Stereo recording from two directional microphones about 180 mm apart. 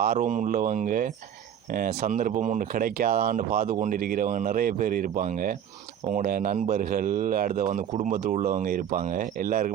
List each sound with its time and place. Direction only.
0.0 s a man's voice: 50° right (ahead or behind)